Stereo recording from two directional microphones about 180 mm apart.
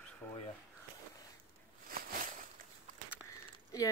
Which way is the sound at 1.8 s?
50° right (ahead or behind).